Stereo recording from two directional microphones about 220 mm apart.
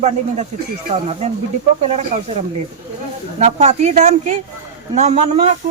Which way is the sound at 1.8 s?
30° right (ahead or behind).